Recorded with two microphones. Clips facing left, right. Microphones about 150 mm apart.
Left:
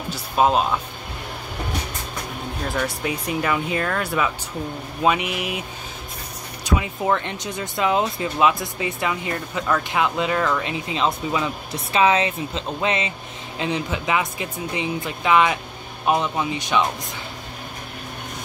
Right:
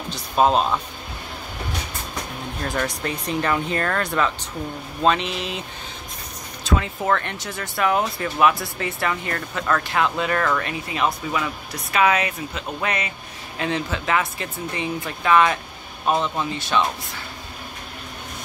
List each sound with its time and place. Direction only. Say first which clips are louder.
0.1 s speech: even; 5° left (ahead or behind)
2.6 s speech: even; 5° left (ahead or behind)
6.6 s speech: even; 15° left (ahead or behind)